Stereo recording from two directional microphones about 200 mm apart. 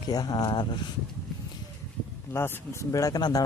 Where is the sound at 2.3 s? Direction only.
15° left (ahead or behind).